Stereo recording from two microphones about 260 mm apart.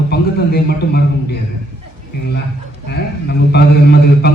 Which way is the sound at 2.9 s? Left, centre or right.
Left.